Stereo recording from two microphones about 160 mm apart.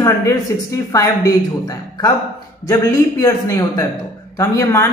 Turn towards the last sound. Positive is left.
turn(degrees=20)  # may be behind; listen again after turning